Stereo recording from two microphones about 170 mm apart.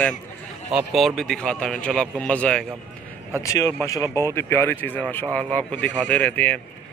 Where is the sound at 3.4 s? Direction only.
20° left (ahead or behind).